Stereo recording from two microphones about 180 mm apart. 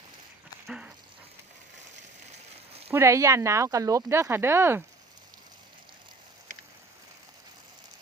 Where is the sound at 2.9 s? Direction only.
15° right (ahead or behind).